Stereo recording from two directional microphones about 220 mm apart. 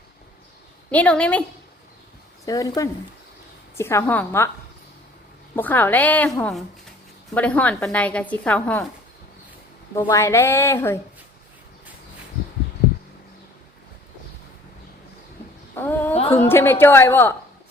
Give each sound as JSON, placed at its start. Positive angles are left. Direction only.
{"t": 0.9, "sound": "a woman's voice", "side_deg": 5}
{"t": 2.4, "sound": "a woman's voice", "side_deg": 15}
{"t": 5.5, "sound": "a woman's voice", "side_deg": 10}
{"t": 9.9, "sound": "a woman's voice", "side_deg": 15}
{"t": 15.7, "sound": "a woman's voice", "side_deg": 10}